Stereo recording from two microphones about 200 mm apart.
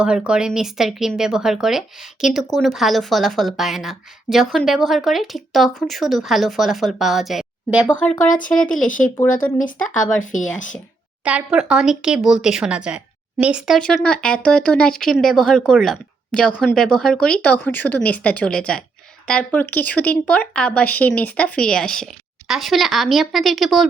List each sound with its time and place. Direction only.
0.0 s speech: 5° right (ahead or behind)
8.7 s speech: 40° left (ahead or behind)
11.2 s speech: 5° right (ahead or behind)